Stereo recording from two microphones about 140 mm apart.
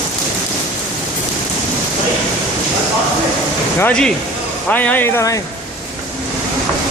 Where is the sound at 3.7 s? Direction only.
10° left (ahead or behind).